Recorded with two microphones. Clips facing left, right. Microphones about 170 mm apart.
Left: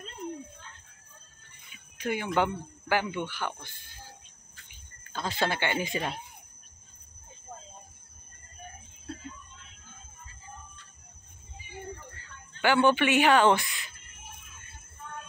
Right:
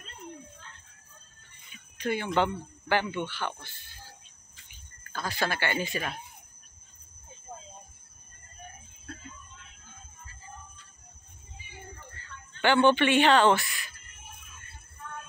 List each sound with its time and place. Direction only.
2.0 s speech: 10° left (ahead or behind)
5.1 s speech: 20° left (ahead or behind)
12.6 s speech: 10° left (ahead or behind)